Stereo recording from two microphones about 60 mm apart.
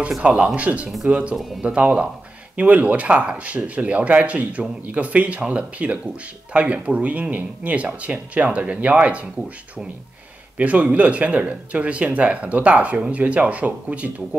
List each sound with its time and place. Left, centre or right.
0.2 s speech: centre
10.6 s speech: right